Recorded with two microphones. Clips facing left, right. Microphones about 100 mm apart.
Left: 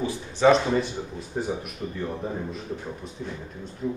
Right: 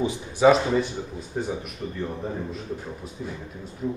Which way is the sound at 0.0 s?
20° right (ahead or behind).